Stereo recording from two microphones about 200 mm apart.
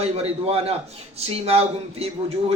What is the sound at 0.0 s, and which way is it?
A man's voice, 30° right (ahead or behind).